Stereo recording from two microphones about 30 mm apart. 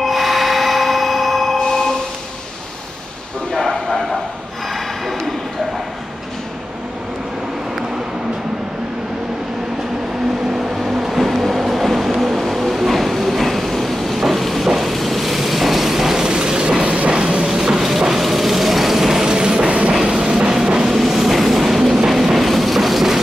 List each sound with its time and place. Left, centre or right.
0.0 s a sound: centre
1.6 s a sound: centre
4.7 s a sound: centre
10.9 s vehicle: centre
11.2 s train: centre
11.8 s vehicle: centre
13.3 s train: centre
14.2 s vehicle: centre
16.3 s train: right
16.8 s music: right
17.5 s music: centre
19.2 s music: right
20.8 s train: centre